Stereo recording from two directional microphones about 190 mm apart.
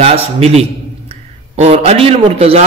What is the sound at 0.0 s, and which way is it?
A man's voice, 30° right (ahead or behind).